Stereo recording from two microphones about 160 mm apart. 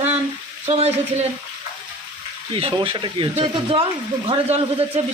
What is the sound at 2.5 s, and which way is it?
Speech, 30° right (ahead or behind).